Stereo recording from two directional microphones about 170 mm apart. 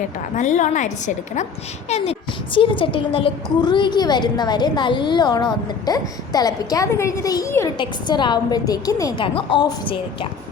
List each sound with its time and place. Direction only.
0.3 s a woman's voice: 45° left (ahead or behind); by 10.2 s 30° left (ahead or behind)